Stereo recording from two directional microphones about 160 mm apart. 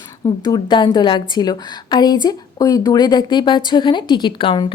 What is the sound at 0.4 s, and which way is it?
A woman's voice, 25° left (ahead or behind).